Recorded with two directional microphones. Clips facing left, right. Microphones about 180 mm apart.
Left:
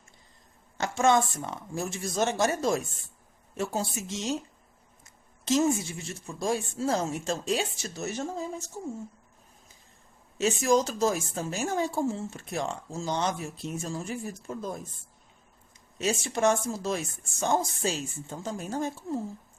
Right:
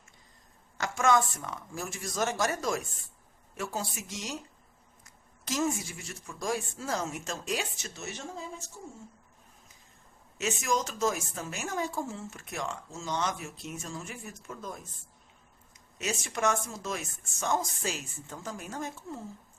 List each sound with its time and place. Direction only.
0.8 s a woman's voice: 25° left (ahead or behind); by 8.6 s 40° left (ahead or behind)
10.3 s a woman's voice: 30° left (ahead or behind)
16.0 s a woman's voice: 30° left (ahead or behind)